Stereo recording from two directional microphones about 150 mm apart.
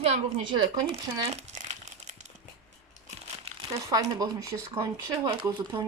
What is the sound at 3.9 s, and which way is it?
A woman's voice, 25° right (ahead or behind).